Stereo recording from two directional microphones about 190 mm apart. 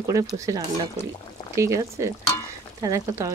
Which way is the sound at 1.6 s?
15° right (ahead or behind).